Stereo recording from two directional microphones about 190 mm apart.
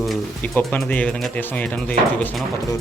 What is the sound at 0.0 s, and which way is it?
Speech, centre (ahead or behind).